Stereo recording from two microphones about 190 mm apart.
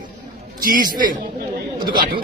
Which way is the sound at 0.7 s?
45° right (ahead or behind).